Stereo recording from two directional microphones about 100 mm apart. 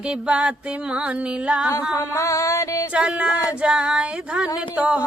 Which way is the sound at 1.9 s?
30° left (ahead or behind).